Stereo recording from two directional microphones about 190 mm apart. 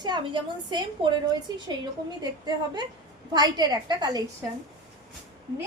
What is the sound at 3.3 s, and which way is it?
Speech, 20° right (ahead or behind).